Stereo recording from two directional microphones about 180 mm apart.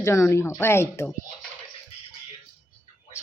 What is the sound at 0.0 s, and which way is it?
Speech, 15° left (ahead or behind).